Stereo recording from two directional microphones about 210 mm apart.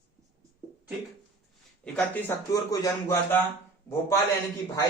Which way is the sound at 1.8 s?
15° left (ahead or behind).